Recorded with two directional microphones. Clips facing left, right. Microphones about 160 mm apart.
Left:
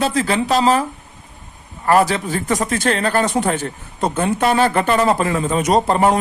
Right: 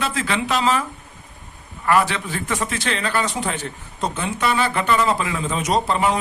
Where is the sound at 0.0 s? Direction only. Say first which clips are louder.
Left 5 dB; 40° left (ahead or behind).